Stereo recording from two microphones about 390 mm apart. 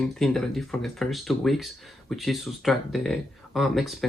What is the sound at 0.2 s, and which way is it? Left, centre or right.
Speech, centre.